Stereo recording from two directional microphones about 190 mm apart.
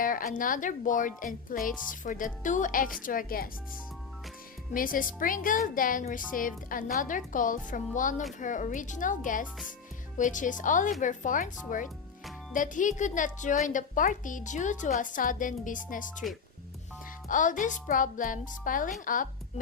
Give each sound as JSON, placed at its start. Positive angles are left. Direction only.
{"t": 0.0, "sound": "a woman's voice", "side_deg": 45}
{"t": 4.7, "sound": "a woman's voice", "side_deg": 45}
{"t": 17.2, "sound": "a woman's voice", "side_deg": 45}